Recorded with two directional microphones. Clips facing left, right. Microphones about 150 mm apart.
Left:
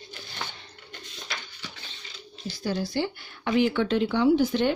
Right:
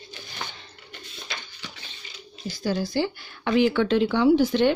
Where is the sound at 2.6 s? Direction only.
90° right.